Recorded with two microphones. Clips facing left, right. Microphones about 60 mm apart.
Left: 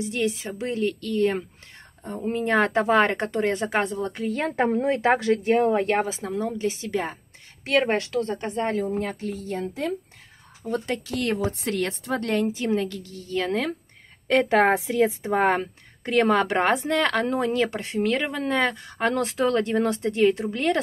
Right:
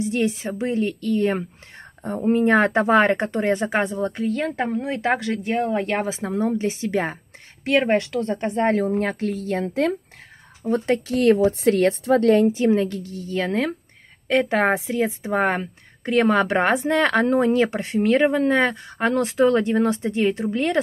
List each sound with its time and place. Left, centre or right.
0.0 s a woman's voice: right
0.5 s speech: centre
4.6 s a woman's voice: centre
6.2 s a woman's voice: right
7.6 s a woman's voice: centre
8.2 s a woman's voice: right
8.6 s a woman's voice: right
9.2 s a woman's voice: right
10.6 s speech: right
12.6 s a woman's voice: right
14.2 s speech: centre